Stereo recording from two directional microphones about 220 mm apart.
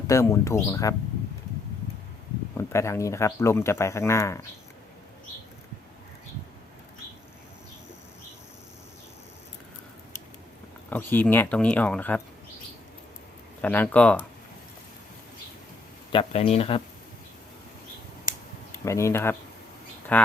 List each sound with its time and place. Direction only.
0.1 s speech: 15° left (ahead or behind)
2.6 s speech: 10° left (ahead or behind)
10.8 s speech: 10° left (ahead or behind)
13.6 s speech: 10° left (ahead or behind)
16.1 s speech: 25° left (ahead or behind)
18.9 s speech: 15° left (ahead or behind)